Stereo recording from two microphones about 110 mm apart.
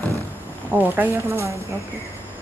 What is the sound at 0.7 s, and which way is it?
Speech, 15° right (ahead or behind).